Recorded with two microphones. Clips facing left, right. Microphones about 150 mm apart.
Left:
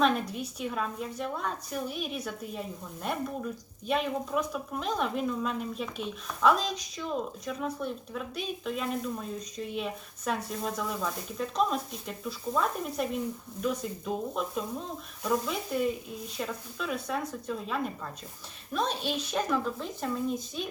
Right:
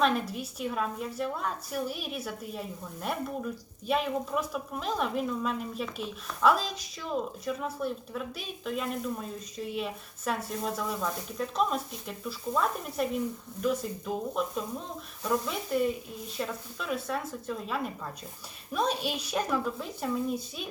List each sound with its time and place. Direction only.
0.0 s speech: centre (ahead or behind)